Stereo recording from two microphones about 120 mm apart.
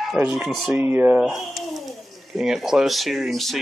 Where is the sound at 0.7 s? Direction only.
20° right (ahead or behind).